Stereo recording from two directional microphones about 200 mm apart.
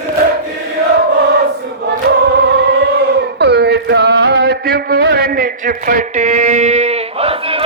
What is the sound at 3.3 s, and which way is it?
Music, 55° right (ahead or behind).